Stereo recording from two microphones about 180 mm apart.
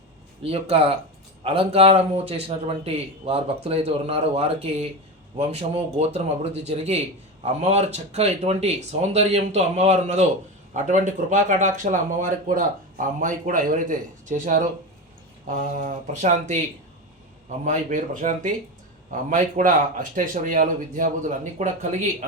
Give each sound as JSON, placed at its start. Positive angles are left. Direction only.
{"t": 0.4, "sound": "a man's voice", "side_deg": -35}
{"t": 17.7, "sound": "speech", "side_deg": -45}